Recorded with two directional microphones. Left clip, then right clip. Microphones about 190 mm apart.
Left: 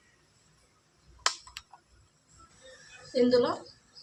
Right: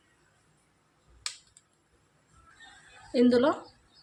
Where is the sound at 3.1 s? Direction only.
60° right (ahead or behind).